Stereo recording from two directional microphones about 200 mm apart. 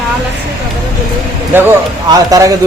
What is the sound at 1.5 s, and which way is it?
A man's voice, 10° right (ahead or behind).